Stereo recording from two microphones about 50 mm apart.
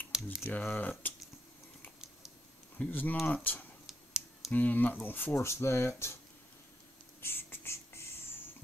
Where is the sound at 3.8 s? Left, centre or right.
Centre.